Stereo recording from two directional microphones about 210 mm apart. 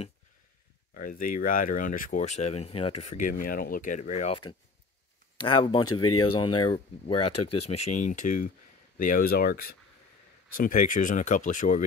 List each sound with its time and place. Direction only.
0.9 s speech: 45° left (ahead or behind)
5.4 s speech: 25° left (ahead or behind)
6.0 s speech: 90° left
6.3 s speech: 20° left (ahead or behind); by 11.8 s 40° left (ahead or behind)